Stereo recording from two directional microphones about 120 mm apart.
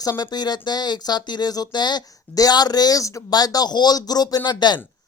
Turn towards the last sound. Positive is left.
turn(degrees=35)  # may be behind; listen again after turning